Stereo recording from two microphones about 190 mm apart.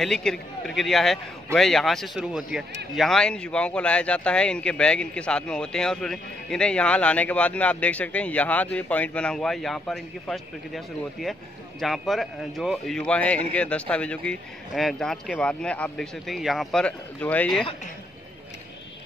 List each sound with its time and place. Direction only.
0.0 s speech: 5° left (ahead or behind)